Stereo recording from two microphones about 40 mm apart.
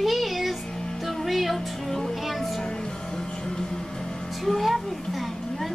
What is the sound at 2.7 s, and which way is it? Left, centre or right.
Music, centre.